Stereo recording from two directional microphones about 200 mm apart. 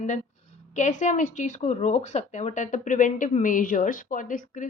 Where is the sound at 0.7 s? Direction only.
40° left (ahead or behind).